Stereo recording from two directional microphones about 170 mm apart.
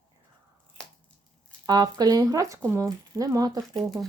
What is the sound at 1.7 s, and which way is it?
Speech, 25° right (ahead or behind).